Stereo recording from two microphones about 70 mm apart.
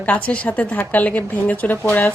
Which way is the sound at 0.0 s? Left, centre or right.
Left.